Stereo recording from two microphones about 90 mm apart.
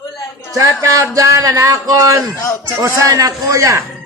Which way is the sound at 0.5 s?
35° right (ahead or behind).